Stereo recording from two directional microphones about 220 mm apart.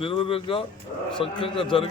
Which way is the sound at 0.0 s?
25° left (ahead or behind).